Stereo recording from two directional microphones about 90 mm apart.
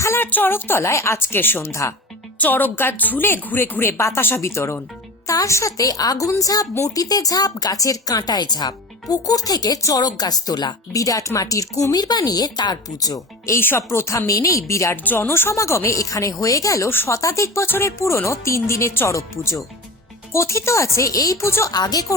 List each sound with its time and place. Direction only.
0.0 s a woman's voice: 25° left (ahead or behind); by 11.0 s 50° left (ahead or behind)
11.0 s speech: 40° left (ahead or behind)
11.9 s a woman's voice: 50° left (ahead or behind)
13.6 s speech: 25° left (ahead or behind)
16.9 s a woman's voice: 25° left (ahead or behind)
17.2 s speech: 35° left (ahead or behind)
21.7 s a woman's voice: 45° left (ahead or behind)